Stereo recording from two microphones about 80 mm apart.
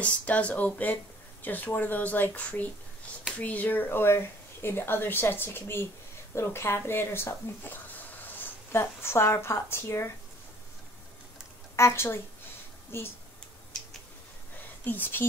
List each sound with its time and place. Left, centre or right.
0.0 s speech: centre; by 10.1 s left
11.7 s a woman's voice: left
14.9 s speech: left